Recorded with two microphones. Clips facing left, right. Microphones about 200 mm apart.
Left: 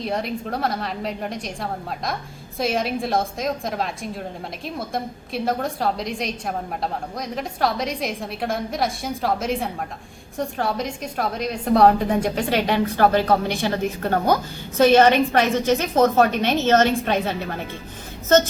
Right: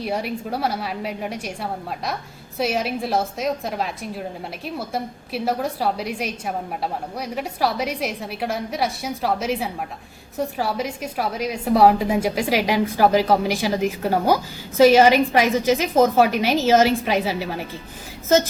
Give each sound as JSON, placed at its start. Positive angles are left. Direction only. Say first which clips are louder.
{"t": 0.0, "sound": "a woman's voice", "louder": "even", "side_deg": -10}